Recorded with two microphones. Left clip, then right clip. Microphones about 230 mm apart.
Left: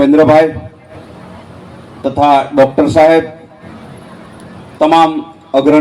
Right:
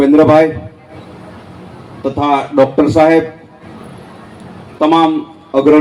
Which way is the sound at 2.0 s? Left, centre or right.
Left.